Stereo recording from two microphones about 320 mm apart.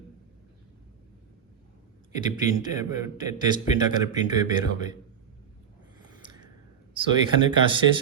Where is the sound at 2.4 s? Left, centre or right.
Centre.